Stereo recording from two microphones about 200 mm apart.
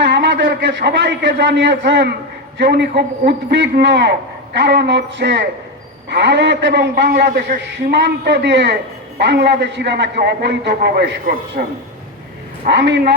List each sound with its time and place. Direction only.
0.2 s a man's voice: 60° right (ahead or behind)
12.6 s a man's voice: 60° right (ahead or behind)